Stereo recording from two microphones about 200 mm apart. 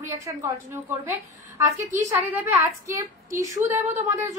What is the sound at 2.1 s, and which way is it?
A woman's voice, 10° right (ahead or behind).